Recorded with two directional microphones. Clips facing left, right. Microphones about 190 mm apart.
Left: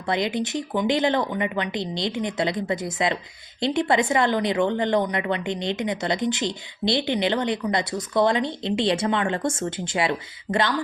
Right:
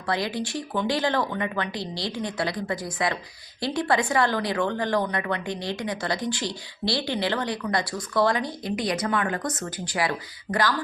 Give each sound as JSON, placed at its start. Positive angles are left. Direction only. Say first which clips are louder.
{"t": 0.1, "sound": "speech", "louder": "left 3 dB", "side_deg": 20}